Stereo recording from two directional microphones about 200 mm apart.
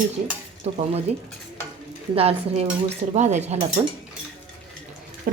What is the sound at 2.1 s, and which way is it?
Speech, 30° right (ahead or behind).